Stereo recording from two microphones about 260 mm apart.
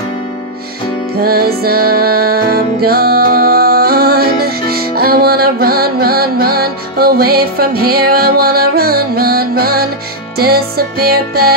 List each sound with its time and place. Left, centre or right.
1.2 s music: right